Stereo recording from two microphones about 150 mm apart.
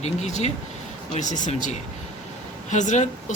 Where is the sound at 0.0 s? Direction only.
50° left (ahead or behind).